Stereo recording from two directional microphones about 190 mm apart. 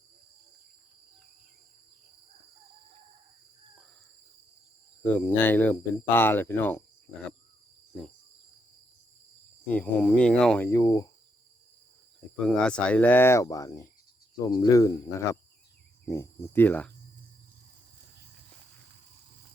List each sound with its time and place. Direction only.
5.0 s speech: 10° left (ahead or behind)
9.6 s speech: 10° left (ahead or behind)
10.7 s speech: 20° left (ahead or behind)
12.5 s speech: 5° left (ahead or behind)